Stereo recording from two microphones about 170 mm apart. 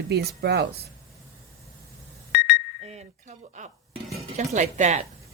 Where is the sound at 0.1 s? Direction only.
75° right (ahead or behind).